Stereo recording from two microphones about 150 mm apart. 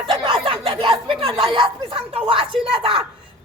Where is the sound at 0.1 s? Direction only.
35° right (ahead or behind).